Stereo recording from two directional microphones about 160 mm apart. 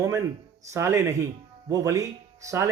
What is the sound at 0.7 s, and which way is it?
Speech, 15° right (ahead or behind).